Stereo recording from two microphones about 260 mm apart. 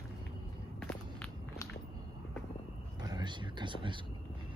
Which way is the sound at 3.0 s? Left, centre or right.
Centre.